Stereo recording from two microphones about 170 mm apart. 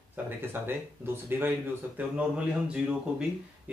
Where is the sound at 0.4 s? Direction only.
10° right (ahead or behind).